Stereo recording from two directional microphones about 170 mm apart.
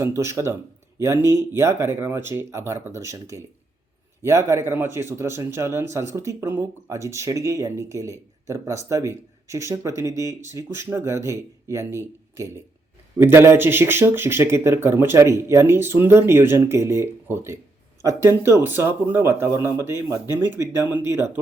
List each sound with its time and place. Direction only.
0.0 s speech: 15° right (ahead or behind)